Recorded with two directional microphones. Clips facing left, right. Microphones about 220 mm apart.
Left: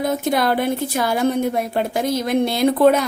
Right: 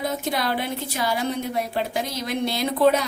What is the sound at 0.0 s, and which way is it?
A woman's voice, 50° left (ahead or behind).